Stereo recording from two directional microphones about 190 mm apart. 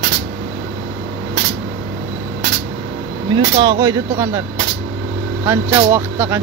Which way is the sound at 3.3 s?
25° right (ahead or behind).